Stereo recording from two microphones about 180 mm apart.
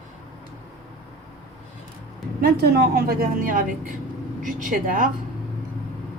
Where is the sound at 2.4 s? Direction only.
55° right (ahead or behind).